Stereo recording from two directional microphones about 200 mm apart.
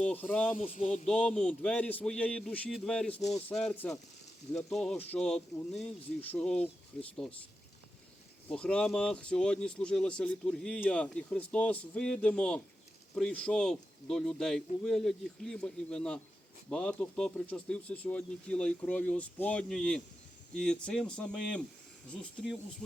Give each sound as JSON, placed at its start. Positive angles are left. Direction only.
{"t": 0.0, "sound": "speech", "side_deg": 10}
{"t": 0.5, "sound": "speech", "side_deg": 35}
{"t": 1.0, "sound": "speech", "side_deg": 5}
{"t": 3.2, "sound": "speech", "side_deg": 35}
{"t": 3.5, "sound": "speech", "side_deg": 5}
{"t": 8.4, "sound": "speech", "side_deg": 5}